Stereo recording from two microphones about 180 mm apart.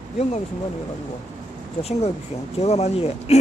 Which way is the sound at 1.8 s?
35° left (ahead or behind).